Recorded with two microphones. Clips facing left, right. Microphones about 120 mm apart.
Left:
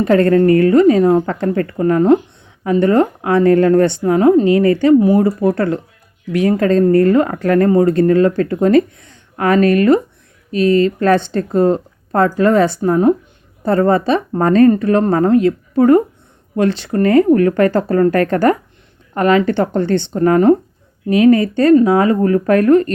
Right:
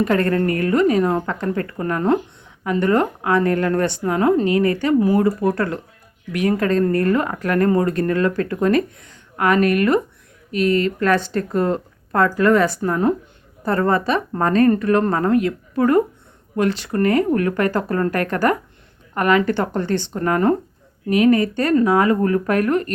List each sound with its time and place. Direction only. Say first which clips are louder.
0.0 s speech: left 7 dB; 30° left (ahead or behind)
1.3 s speech: left 5 dB; 40° left (ahead or behind)